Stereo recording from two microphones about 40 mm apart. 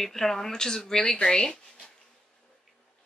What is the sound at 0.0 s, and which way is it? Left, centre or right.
Speech, centre.